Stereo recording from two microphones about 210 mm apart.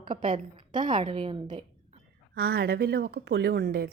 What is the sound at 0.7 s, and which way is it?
Speech, 20° right (ahead or behind).